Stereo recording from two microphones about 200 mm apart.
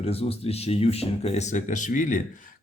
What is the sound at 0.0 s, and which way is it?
A man's voice, 30° left (ahead or behind).